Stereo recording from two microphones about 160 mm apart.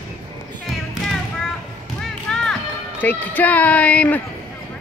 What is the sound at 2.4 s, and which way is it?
Speech, 10° left (ahead or behind).